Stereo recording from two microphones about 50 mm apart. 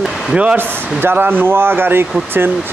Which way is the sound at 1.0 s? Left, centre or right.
Right.